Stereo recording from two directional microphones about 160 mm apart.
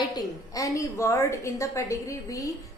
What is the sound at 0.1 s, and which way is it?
A woman's voice, 20° left (ahead or behind).